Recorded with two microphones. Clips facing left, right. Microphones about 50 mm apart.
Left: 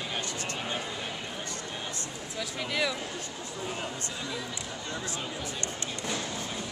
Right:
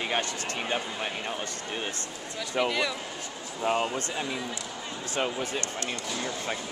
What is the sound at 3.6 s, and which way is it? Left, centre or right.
Speech, right.